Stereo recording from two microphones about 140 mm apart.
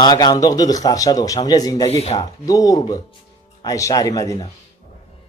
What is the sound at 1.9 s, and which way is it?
Speech, 45° left (ahead or behind).